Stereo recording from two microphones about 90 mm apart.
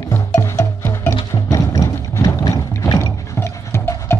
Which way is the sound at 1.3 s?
40° left (ahead or behind).